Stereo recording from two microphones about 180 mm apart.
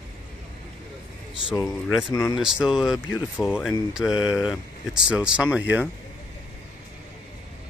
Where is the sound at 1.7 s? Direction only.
Centre (ahead or behind).